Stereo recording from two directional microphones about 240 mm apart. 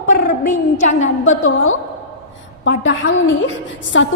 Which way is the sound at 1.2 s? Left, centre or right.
Left.